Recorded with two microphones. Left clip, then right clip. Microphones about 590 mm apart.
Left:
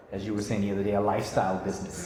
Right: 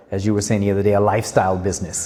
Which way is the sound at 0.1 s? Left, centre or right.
Right.